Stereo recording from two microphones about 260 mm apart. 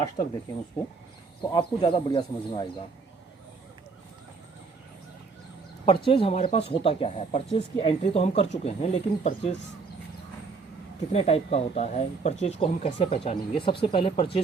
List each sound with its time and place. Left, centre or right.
1.5 s speech: centre
5.8 s speech: centre
11.1 s speech: left